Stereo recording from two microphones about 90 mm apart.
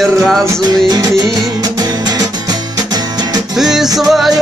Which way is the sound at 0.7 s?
45° right (ahead or behind).